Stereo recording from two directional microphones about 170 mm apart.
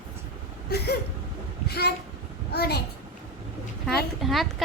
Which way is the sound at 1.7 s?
70° left (ahead or behind).